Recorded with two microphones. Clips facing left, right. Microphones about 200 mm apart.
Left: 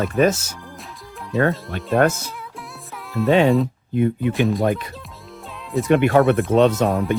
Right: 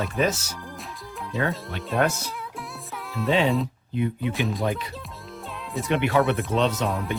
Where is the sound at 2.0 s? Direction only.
45° left (ahead or behind).